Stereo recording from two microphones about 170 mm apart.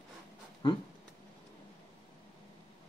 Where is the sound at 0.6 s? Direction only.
25° left (ahead or behind).